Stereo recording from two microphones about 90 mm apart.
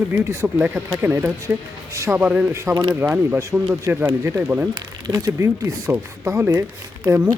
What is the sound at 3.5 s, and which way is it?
Speech, 15° right (ahead or behind).